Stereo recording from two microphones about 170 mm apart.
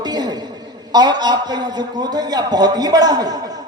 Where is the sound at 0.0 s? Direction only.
25° right (ahead or behind).